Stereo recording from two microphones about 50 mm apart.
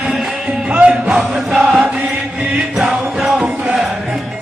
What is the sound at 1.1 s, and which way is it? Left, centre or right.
Music, centre.